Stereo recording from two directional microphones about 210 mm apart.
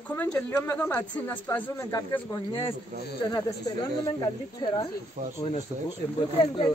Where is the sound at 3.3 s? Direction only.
20° left (ahead or behind).